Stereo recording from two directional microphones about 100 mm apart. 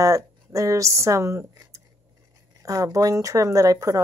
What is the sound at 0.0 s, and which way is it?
Speech, 35° right (ahead or behind).